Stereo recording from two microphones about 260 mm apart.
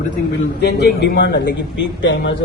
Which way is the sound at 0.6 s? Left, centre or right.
Left.